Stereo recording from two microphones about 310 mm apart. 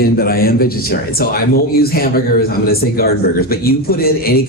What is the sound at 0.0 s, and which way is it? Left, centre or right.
A man's voice, left.